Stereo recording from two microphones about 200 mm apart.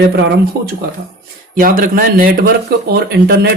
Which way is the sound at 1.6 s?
45° right (ahead or behind).